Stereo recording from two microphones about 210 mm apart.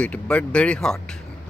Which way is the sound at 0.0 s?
5° left (ahead or behind).